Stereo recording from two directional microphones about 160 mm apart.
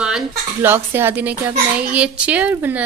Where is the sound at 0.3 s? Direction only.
15° right (ahead or behind).